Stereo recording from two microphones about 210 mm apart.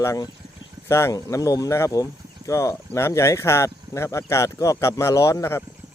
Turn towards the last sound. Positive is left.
turn(degrees=15)  # may be behind; listen again after turning